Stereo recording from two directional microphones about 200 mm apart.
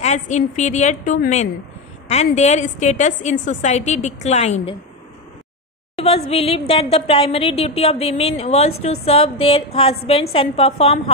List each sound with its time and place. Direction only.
0.0 s a woman's voice: 35° left (ahead or behind)
5.9 s a woman's voice: 30° left (ahead or behind)